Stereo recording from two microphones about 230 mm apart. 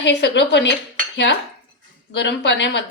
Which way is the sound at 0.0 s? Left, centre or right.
Left.